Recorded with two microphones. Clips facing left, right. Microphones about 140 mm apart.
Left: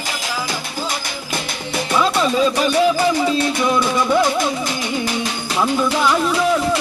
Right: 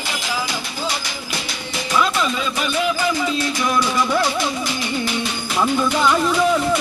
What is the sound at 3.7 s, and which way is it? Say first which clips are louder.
Music: left 2 dB; 20° left (ahead or behind).